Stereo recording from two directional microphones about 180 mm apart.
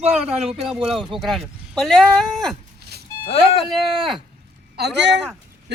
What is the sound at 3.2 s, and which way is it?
Speech, 35° left (ahead or behind).